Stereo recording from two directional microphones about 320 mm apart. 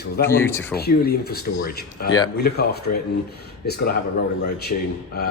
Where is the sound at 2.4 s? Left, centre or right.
Left.